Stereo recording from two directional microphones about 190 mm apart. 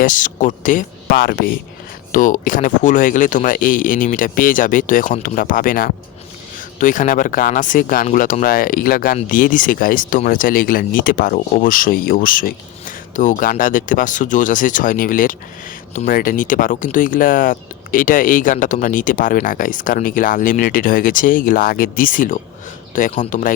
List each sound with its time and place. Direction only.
0.0 s speech: 45° left (ahead or behind)